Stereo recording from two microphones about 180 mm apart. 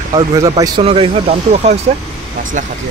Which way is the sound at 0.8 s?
30° right (ahead or behind).